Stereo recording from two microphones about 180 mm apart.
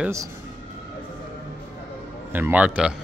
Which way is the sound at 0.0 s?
15° right (ahead or behind).